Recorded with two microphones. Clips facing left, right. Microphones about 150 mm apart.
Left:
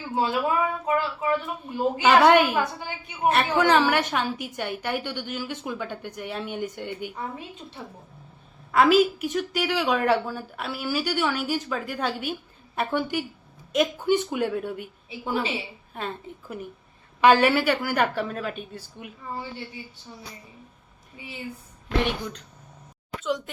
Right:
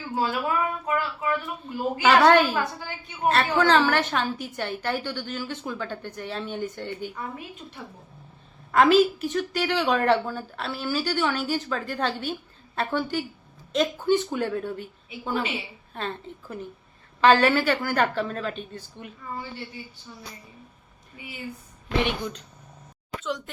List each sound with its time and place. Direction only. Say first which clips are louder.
0.2 s speech: left 2 dB; 20° left (ahead or behind)
8.7 s speech: even; 5° left (ahead or behind)
20.1 s a sound: left 1 dB; 20° left (ahead or behind)
21.9 s a woman's voice: even; 20° right (ahead or behind)